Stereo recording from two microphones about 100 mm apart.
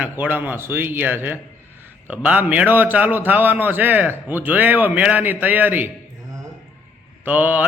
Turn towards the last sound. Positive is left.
turn(degrees=-15)  # may be behind; listen again after turning